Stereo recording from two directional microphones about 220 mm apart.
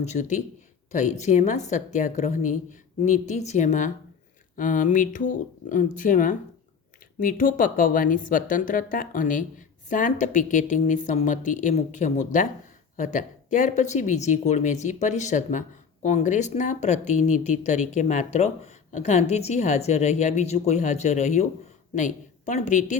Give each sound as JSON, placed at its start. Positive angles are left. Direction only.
{"t": 0.0, "sound": "a woman's voice", "side_deg": 30}